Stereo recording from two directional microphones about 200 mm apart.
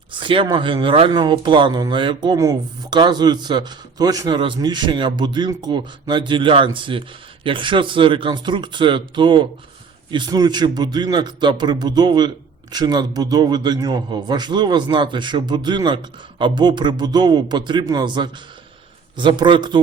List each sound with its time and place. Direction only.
0.2 s speech: 25° right (ahead or behind)